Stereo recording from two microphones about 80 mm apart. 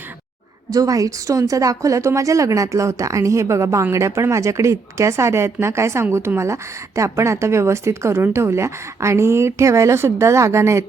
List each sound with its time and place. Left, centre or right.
0.7 s a woman's voice: right